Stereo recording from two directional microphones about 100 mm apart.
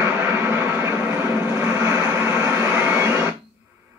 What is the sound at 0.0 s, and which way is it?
Vehicle, 20° right (ahead or behind).